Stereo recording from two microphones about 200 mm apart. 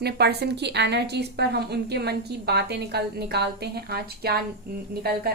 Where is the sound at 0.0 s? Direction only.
55° right (ahead or behind).